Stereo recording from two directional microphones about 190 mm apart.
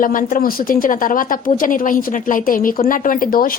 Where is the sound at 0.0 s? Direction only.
45° left (ahead or behind).